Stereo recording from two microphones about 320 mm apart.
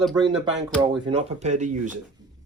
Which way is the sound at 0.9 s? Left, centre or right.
Centre.